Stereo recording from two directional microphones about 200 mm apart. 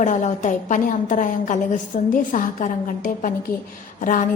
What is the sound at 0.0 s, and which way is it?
A woman's voice, 35° left (ahead or behind).